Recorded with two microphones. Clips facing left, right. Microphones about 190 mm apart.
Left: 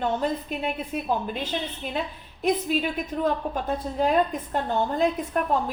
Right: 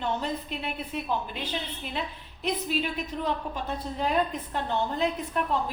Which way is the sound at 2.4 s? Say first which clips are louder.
Left 5 dB; 45° left (ahead or behind).